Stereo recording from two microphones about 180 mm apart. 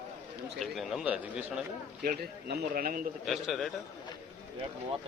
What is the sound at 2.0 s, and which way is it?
Speech, 55° right (ahead or behind).